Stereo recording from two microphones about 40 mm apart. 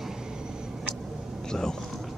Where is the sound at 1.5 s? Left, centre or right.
Centre.